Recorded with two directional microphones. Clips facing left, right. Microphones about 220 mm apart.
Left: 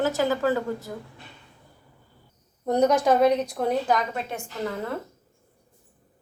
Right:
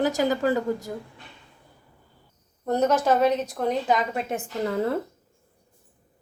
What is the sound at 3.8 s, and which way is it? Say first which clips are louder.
Speech: right 1 dB; centre (ahead or behind).